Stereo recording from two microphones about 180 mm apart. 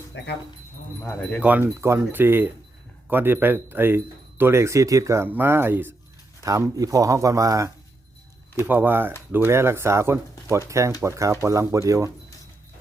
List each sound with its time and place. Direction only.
0.1 s speech: 80° left
1.0 s speech: 5° left (ahead or behind)
1.4 s speech: 10° right (ahead or behind)